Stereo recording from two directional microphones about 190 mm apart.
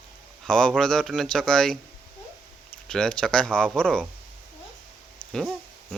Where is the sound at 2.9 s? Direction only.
5° left (ahead or behind).